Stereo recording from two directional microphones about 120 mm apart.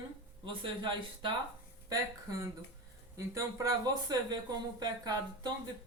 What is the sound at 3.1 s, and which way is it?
Speech, 25° right (ahead or behind).